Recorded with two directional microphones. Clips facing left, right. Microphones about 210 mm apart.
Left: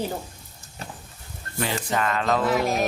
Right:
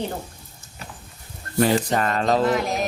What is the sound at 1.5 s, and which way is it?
Speech, 40° right (ahead or behind).